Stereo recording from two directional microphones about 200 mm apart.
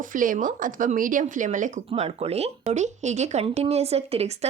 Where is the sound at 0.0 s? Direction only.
40° right (ahead or behind).